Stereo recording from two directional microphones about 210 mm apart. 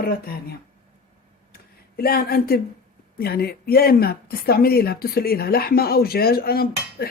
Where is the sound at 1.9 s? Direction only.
45° left (ahead or behind).